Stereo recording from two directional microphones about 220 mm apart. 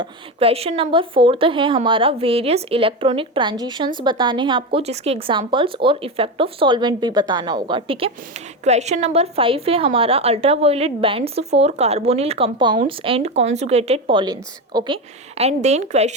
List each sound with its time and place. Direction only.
0.0 s a woman's voice: 25° right (ahead or behind)